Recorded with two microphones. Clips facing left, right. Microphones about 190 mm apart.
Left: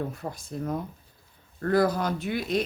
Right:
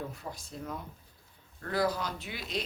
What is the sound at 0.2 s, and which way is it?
Speech, 50° left (ahead or behind).